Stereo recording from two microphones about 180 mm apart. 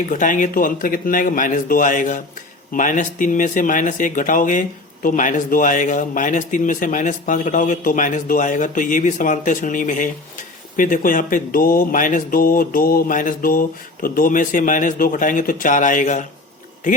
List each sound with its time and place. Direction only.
0.1 s speech: 45° left (ahead or behind)